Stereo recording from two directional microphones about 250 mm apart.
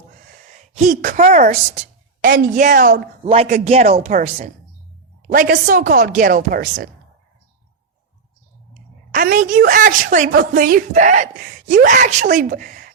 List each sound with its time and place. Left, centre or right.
0.8 s a woman's voice: right
9.1 s a woman's voice: right